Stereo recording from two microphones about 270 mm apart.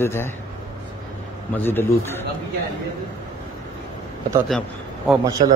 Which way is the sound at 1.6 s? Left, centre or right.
Centre.